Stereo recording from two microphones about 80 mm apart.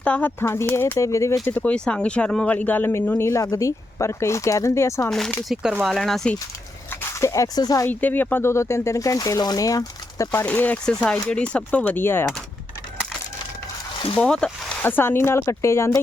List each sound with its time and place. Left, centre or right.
0.0 s speech: centre
0.9 s speech: left
1.5 s speech: centre
3.2 s speech: left
3.4 s speech: left
5.0 s speech: centre
7.1 s speech: left
7.9 s speech: left
10.4 s speech: left
14.2 s speech: centre
14.8 s speech: left